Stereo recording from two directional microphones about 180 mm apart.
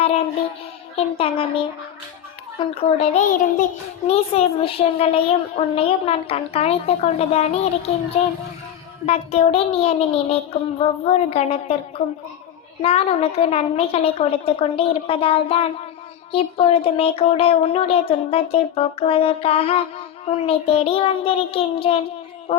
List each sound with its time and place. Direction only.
0.0 s music: 35° left (ahead or behind)
1.2 s a child's voice: 30° left (ahead or behind)